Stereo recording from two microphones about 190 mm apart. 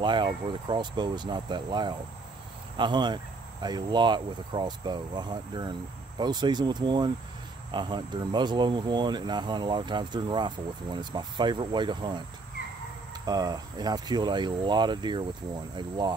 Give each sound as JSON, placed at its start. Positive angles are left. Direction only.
{"t": 0.0, "sound": "speech", "side_deg": -25}
{"t": 13.2, "sound": "speech", "side_deg": -20}